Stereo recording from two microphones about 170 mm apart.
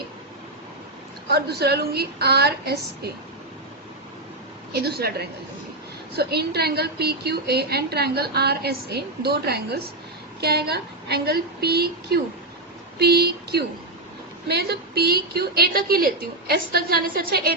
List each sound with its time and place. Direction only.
1.3 s a woman's voice: 70° right (ahead or behind)
4.7 s a woman's voice: 70° right (ahead or behind)